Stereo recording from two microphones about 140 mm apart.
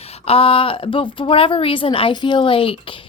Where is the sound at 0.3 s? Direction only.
40° left (ahead or behind).